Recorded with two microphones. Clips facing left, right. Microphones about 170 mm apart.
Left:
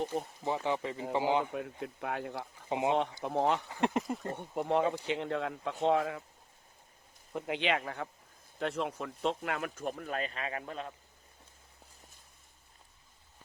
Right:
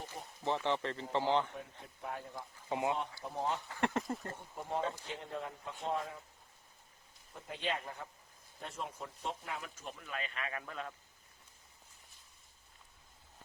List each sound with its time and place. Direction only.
0.4 s speech: 10° left (ahead or behind)
1.5 s speech: 85° left
2.6 s speech: 20° left (ahead or behind)
3.2 s speech: 75° left (ahead or behind)
3.7 s speech: 20° left (ahead or behind)
4.4 s speech: 75° left (ahead or behind)
7.3 s speech: 75° left (ahead or behind); by 10.9 s 25° left (ahead or behind)